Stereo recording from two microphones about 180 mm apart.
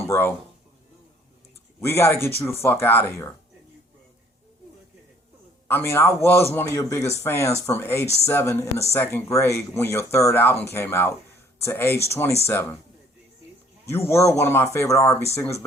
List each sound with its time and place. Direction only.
0.0 s speech: 10° left (ahead or behind)
1.8 s speech: 15° left (ahead or behind)
5.6 s speech: 15° left (ahead or behind)
13.8 s speech: 15° left (ahead or behind)